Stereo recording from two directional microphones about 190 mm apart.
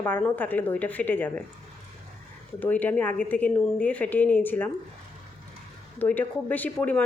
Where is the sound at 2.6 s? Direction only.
10° left (ahead or behind).